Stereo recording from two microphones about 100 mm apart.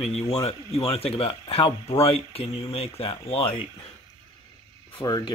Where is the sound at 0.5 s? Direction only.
70° left (ahead or behind).